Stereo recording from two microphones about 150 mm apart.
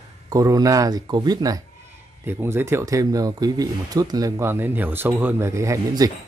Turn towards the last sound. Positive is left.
turn(degrees=-20)  # may be behind; listen again after turning